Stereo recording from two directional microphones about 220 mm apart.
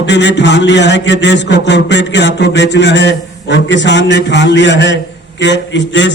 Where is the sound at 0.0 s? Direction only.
50° left (ahead or behind).